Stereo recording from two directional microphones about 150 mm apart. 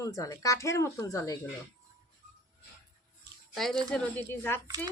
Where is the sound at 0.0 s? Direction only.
20° left (ahead or behind).